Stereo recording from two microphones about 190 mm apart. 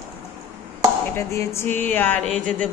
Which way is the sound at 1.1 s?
15° left (ahead or behind).